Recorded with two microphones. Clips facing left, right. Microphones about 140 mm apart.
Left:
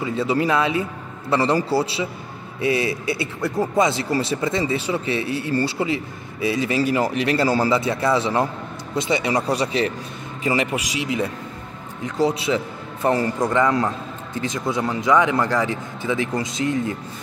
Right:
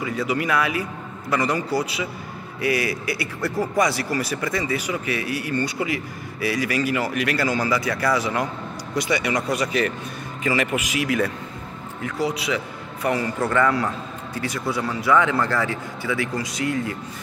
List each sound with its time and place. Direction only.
0.0 s a man's voice: 25° left (ahead or behind)
13.4 s speech: 20° left (ahead or behind)